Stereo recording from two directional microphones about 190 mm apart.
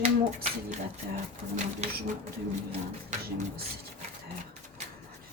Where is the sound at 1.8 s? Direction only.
35° right (ahead or behind).